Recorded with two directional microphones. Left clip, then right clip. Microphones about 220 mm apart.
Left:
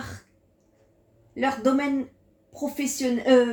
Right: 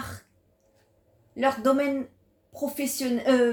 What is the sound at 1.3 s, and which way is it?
Speech, 25° right (ahead or behind).